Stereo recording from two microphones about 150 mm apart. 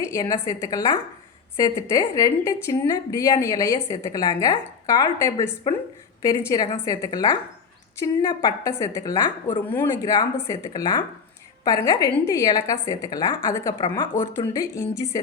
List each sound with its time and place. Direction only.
0.0 s a woman's voice: 25° left (ahead or behind)
14.5 s a woman's voice: 20° left (ahead or behind)